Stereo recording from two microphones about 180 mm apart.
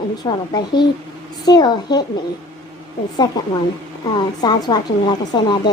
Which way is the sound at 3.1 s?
25° left (ahead or behind).